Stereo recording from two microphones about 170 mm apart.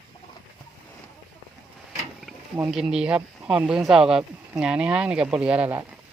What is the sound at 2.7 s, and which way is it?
Speech, 5° right (ahead or behind).